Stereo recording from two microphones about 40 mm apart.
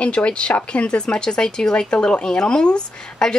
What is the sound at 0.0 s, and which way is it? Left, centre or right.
Speech, left.